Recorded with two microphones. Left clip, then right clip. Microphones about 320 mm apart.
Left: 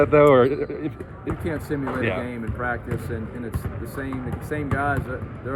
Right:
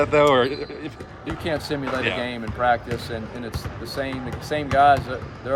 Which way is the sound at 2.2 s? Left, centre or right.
Right.